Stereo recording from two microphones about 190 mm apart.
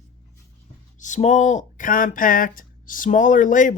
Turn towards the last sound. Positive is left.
turn(degrees=40)  # may be behind; listen again after turning